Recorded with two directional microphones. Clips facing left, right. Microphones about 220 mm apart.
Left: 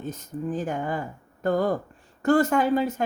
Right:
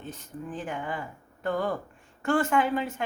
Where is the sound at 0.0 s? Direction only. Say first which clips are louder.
Left 7 dB; 40° left (ahead or behind).